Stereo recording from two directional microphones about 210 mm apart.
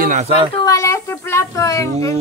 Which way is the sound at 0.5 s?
15° left (ahead or behind).